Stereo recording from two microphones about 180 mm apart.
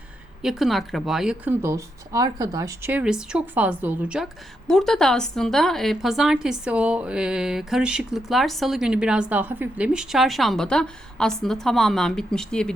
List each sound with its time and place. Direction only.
0.4 s a woman's voice: centre (ahead or behind)
1.6 s a woman's voice: 20° right (ahead or behind); by 12.7 s 5° left (ahead or behind)